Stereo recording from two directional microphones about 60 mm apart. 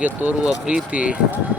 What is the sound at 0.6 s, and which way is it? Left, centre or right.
Speech, centre.